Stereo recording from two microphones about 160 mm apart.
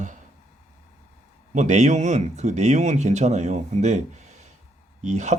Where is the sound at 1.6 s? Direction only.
45° right (ahead or behind).